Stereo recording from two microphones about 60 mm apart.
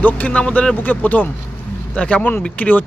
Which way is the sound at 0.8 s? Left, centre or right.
Left.